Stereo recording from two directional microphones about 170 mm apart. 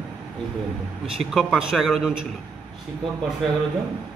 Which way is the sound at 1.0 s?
Centre (ahead or behind).